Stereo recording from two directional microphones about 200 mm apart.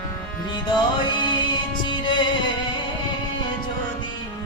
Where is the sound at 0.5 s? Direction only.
20° left (ahead or behind).